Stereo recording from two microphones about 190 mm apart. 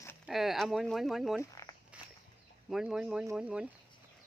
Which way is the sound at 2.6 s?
5° right (ahead or behind).